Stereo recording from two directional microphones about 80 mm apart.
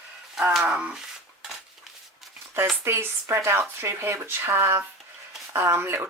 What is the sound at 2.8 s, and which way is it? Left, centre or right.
Speech, right.